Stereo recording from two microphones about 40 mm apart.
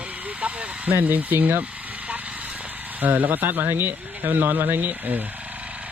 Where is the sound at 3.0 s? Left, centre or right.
Right.